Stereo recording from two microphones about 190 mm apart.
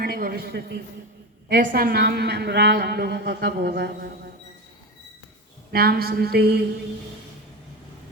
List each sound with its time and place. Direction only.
0.0 s a man's voice: 50° right (ahead or behind)
5.7 s a woman's voice: 55° right (ahead or behind)